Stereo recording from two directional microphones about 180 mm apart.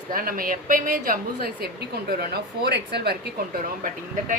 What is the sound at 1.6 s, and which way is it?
A woman's voice, 65° right (ahead or behind).